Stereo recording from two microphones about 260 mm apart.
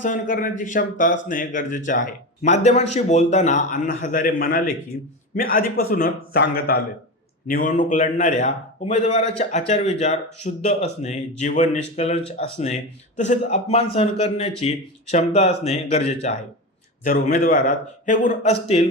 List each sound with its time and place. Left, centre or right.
0.0 s a man's voice: left